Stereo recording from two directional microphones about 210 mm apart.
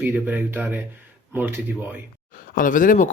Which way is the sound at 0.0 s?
10° right (ahead or behind).